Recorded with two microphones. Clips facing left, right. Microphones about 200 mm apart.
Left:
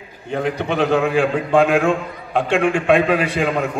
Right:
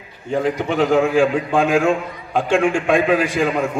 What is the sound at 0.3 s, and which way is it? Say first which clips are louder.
A man's voice: right 2 dB; 65° left (ahead or behind).